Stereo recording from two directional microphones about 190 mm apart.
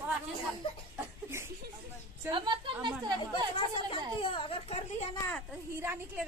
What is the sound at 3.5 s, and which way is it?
A child's voice, 25° left (ahead or behind).